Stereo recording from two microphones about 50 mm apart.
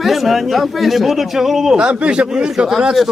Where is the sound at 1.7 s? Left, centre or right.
Right.